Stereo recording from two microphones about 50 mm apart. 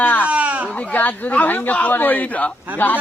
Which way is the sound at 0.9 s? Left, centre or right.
Left.